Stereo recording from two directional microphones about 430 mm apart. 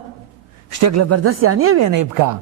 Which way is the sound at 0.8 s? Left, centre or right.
Right.